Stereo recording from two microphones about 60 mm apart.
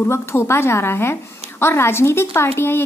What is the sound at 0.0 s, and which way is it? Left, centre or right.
A woman's voice, left.